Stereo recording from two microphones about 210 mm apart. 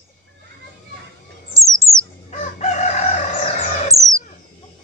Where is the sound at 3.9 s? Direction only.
15° right (ahead or behind).